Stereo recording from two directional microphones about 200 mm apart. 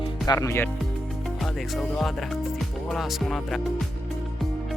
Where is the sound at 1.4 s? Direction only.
Centre (ahead or behind).